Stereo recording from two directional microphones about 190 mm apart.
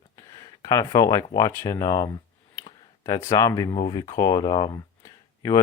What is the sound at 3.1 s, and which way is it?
Speech, 20° left (ahead or behind).